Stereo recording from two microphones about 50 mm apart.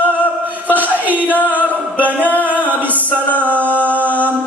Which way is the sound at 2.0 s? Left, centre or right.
Right.